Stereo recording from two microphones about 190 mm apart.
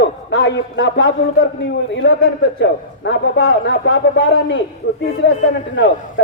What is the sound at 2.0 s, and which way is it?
Speech, 85° left.